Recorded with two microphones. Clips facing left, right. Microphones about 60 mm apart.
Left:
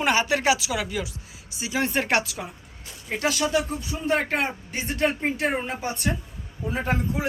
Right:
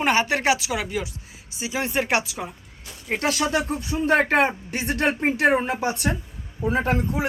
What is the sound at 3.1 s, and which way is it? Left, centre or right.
A woman's voice, right.